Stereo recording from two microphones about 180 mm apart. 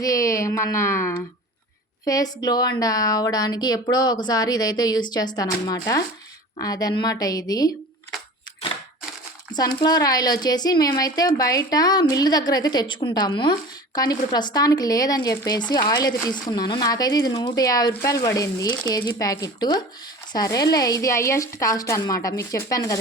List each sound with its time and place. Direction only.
0.0 s a woman's voice: 20° left (ahead or behind)
9.6 s a woman's voice: 20° left (ahead or behind)